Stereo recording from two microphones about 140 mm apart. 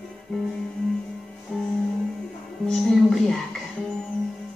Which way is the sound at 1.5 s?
5° left (ahead or behind).